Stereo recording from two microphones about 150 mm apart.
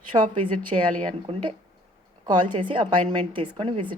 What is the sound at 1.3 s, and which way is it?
A woman's voice, 40° right (ahead or behind).